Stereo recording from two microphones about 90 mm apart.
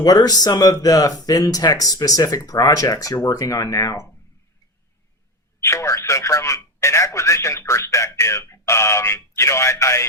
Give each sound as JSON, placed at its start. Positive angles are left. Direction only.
{"t": 0.0, "sound": "speech", "side_deg": 45}
{"t": 5.5, "sound": "speech", "side_deg": 30}